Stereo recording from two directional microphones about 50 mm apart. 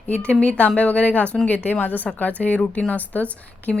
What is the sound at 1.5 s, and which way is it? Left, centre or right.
A woman's voice, left.